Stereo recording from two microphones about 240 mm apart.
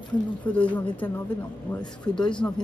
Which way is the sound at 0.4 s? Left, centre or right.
Centre.